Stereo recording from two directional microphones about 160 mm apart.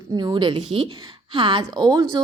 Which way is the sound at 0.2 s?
30° right (ahead or behind).